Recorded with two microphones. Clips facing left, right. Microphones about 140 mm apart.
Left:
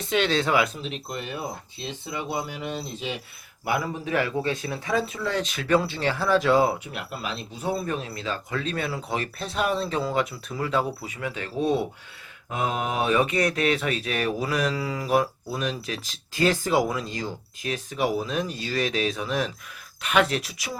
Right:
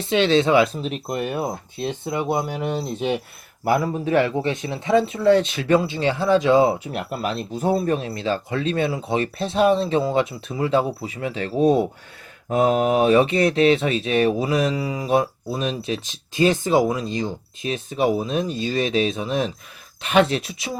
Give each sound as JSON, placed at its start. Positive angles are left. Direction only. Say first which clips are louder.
{"t": 0.1, "sound": "speech", "louder": "right 6 dB", "side_deg": -25}
{"t": 0.8, "sound": "speech", "louder": "right 7 dB", "side_deg": -45}
{"t": 3.7, "sound": "speech", "louder": "right 6 dB", "side_deg": -35}
{"t": 6.8, "sound": "speech", "louder": "right 7 dB", "side_deg": -45}